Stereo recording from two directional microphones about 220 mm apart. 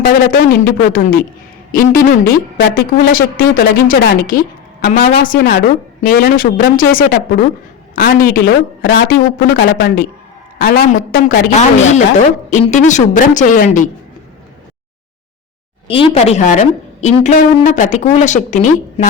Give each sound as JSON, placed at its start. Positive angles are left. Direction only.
{"t": 0.0, "sound": "a woman's voice", "side_deg": 40}
{"t": 15.9, "sound": "a woman's voice", "side_deg": 25}